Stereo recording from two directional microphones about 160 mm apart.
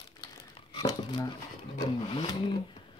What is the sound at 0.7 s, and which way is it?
Crumpling, 30° left (ahead or behind).